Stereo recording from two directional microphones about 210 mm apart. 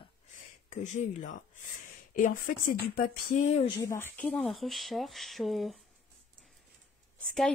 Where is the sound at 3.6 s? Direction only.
15° left (ahead or behind); by 5.7 s centre (ahead or behind).